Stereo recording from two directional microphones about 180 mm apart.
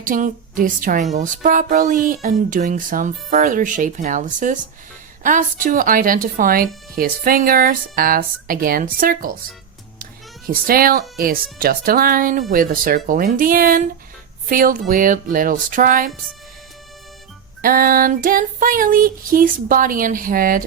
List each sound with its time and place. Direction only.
0.0 s child singing: 50° right (ahead or behind)
10.7 s child singing: 55° right (ahead or behind)
17.6 s child singing: 50° right (ahead or behind)